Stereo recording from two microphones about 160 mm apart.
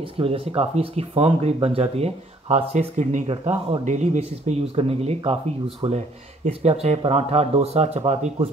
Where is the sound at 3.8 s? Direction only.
45° right (ahead or behind).